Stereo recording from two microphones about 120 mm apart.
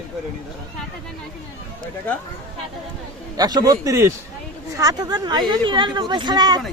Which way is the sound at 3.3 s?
35° right (ahead or behind).